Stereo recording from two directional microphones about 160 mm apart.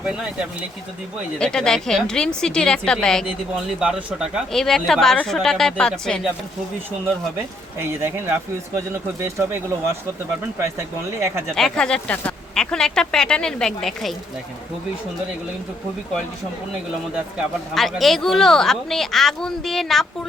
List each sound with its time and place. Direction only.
0.0 s speech: 5° right (ahead or behind)
1.4 s speech: 5° left (ahead or behind)
3.8 s speech: 5° right (ahead or behind)
7.8 s speech: 15° right (ahead or behind)
11.5 s speech: 5° left (ahead or behind)
17.3 s speech: centre (ahead or behind)